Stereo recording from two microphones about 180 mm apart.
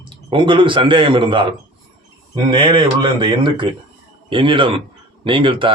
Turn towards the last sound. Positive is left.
turn(degrees=-30)  # may be behind; listen again after turning